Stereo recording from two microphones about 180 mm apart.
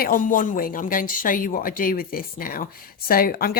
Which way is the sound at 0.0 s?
50° left (ahead or behind).